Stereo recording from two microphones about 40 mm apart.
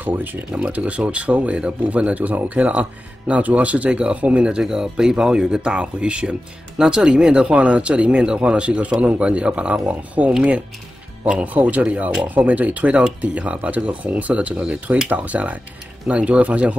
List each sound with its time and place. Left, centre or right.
0.0 s speech: right
0.5 s speech: right
9.8 s speech: right
11.4 s speech: right